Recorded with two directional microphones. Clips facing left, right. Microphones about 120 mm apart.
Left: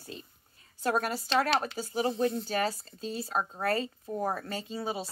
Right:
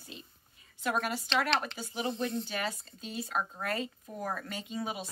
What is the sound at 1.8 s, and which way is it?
Speech, 40° left (ahead or behind).